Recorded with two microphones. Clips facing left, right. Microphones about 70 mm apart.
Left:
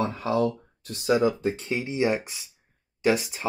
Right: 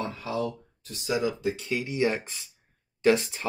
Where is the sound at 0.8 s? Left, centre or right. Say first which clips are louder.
Left 6 dB; left.